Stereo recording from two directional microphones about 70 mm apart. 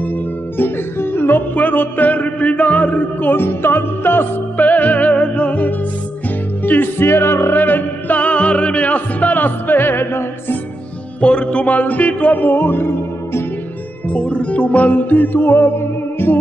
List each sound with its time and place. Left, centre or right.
0.6 s music: left
11.1 s music: centre; by 13.4 s left
14.0 s music: centre; by 16.3 s left